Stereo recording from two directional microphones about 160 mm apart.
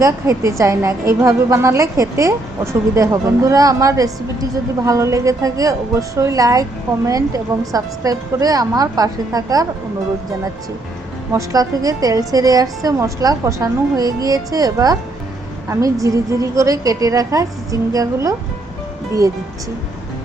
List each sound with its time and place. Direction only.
0.0 s a woman's voice: 20° right (ahead or behind)
11.3 s a woman's voice: 20° right (ahead or behind)